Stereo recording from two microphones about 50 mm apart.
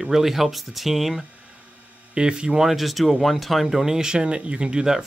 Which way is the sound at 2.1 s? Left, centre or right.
Centre.